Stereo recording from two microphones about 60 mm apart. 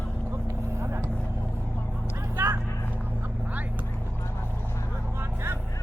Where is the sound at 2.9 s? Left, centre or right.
Right.